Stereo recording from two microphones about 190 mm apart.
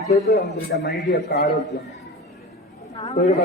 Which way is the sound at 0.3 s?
55° left (ahead or behind).